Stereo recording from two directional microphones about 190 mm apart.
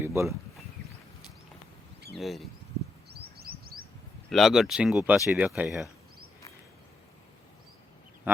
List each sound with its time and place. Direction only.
0.0 s speech: 15° right (ahead or behind)
2.1 s speech: centre (ahead or behind)
3.1 s bird: 55° right (ahead or behind)
4.3 s speech: centre (ahead or behind)